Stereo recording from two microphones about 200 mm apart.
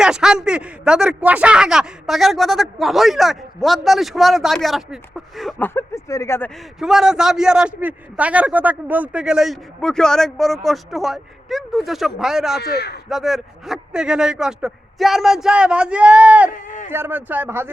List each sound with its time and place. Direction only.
0.0 s speech: 5° right (ahead or behind); by 6.5 s 15° left (ahead or behind)
6.7 s speech: centre (ahead or behind)
12.5 s a man's voice: 55° left (ahead or behind)
13.1 s speech: centre (ahead or behind)
16.5 s a sound: 40° left (ahead or behind)
16.9 s a man's voice: 10° right (ahead or behind)